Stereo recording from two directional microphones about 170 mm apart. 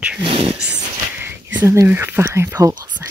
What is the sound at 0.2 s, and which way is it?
Whispering, 30° right (ahead or behind).